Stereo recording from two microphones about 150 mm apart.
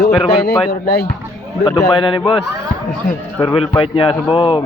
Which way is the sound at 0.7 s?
90° left.